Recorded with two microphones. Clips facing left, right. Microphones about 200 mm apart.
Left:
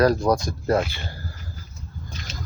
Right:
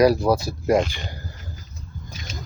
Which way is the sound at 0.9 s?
15° right (ahead or behind).